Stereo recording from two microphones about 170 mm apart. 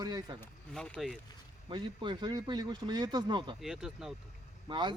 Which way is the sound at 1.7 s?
30° right (ahead or behind).